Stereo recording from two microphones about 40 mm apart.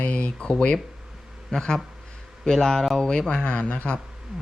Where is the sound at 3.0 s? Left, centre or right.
Centre.